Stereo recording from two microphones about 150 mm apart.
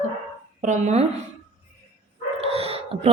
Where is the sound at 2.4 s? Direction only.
40° right (ahead or behind).